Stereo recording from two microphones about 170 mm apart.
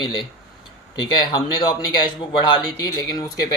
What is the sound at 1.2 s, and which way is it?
Speech, 25° left (ahead or behind).